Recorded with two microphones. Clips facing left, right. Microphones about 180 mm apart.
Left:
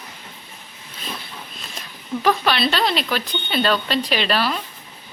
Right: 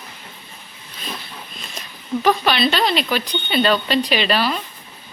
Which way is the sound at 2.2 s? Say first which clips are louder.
Right 2 dB; centre (ahead or behind).